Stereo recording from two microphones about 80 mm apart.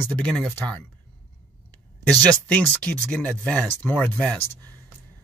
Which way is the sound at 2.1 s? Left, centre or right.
Centre.